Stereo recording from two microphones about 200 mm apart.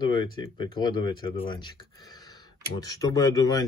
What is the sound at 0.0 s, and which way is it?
Speech, 25° left (ahead or behind).